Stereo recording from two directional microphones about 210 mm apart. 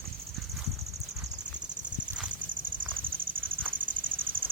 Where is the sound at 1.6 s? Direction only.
35° right (ahead or behind).